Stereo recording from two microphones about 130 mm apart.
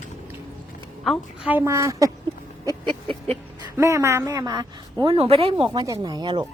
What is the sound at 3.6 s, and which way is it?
Speech, 25° right (ahead or behind).